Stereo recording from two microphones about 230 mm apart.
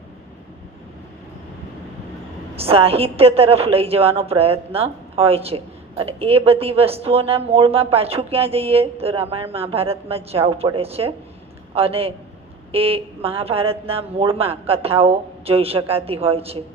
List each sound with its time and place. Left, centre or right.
2.6 s a woman's voice: right